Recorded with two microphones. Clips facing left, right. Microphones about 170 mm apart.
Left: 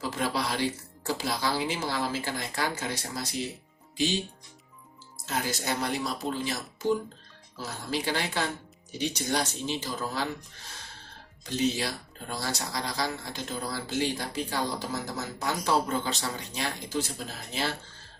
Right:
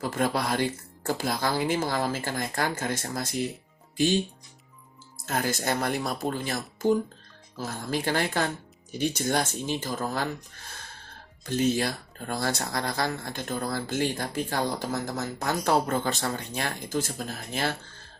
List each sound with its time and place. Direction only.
0.0 s speech: 50° right (ahead or behind)
5.1 s speech: 50° right (ahead or behind)
11.4 s speech: 50° right (ahead or behind)